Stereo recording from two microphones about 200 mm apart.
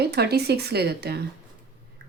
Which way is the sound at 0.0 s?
55° right (ahead or behind).